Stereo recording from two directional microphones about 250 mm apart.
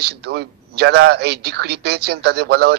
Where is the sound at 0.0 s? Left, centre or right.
Right.